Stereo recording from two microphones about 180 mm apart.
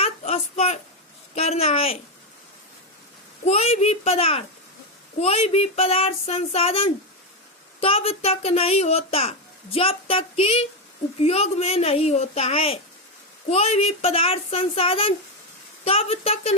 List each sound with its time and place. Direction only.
0.0 s a sound: 35° left (ahead or behind)
1.4 s speech: 35° left (ahead or behind)
3.4 s speech: 35° left (ahead or behind)